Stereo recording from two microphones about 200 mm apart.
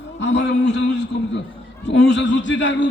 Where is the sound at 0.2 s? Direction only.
65° left (ahead or behind).